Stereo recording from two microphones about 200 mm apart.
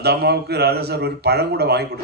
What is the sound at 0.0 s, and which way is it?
A man's voice, 55° right (ahead or behind).